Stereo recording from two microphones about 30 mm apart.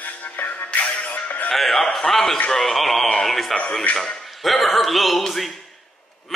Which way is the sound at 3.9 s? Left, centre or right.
Left.